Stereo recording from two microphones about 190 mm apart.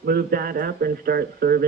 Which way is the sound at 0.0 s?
55° right (ahead or behind).